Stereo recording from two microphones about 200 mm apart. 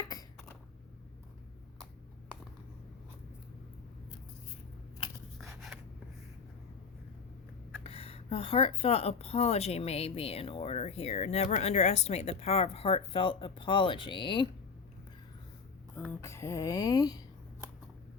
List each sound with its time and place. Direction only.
0.1 s a sound: 20° left (ahead or behind)
5.5 s writing: centre (ahead or behind)
7.9 s speech: 30° left (ahead or behind)
16.0 s speech: 10° left (ahead or behind)